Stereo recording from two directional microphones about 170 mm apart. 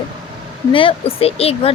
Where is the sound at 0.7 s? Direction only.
30° left (ahead or behind).